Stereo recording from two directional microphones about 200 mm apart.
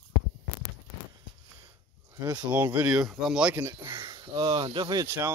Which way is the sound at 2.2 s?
20° right (ahead or behind).